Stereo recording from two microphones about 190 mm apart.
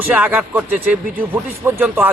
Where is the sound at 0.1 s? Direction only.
10° right (ahead or behind).